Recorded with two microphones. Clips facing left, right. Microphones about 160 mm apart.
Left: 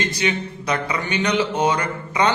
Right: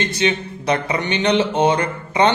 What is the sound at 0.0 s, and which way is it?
Speech, 25° right (ahead or behind).